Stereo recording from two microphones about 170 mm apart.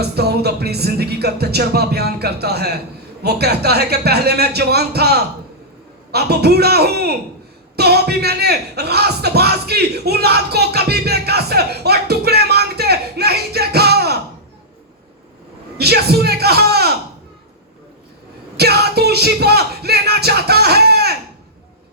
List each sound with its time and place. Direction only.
0.0 s music: 70° right (ahead or behind)
7.8 s speech: 70° right (ahead or behind)
15.8 s music: 70° right (ahead or behind)
18.5 s music: 70° right (ahead or behind)